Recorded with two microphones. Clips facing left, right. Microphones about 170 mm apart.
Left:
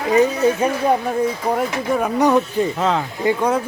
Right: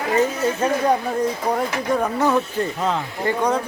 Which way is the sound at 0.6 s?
10° left (ahead or behind).